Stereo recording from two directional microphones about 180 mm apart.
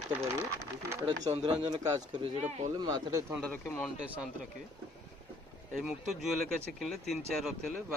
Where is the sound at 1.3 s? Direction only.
25° right (ahead or behind).